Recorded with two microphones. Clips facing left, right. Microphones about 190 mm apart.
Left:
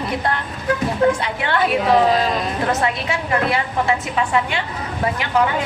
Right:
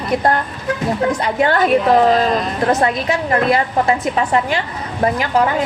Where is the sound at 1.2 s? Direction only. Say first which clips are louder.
Right 5 dB; 40° right (ahead or behind).